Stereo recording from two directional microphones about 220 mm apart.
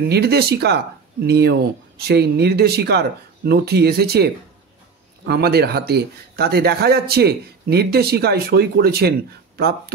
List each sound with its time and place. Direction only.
0.1 s speech: 45° right (ahead or behind)